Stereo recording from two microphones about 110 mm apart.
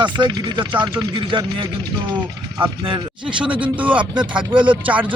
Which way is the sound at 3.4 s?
15° right (ahead or behind).